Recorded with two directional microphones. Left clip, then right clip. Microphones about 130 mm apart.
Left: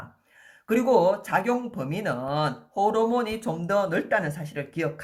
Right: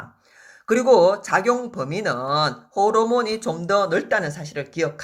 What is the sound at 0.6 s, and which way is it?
Speech, 30° right (ahead or behind).